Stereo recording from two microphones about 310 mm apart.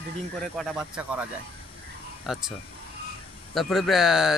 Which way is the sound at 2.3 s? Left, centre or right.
Centre.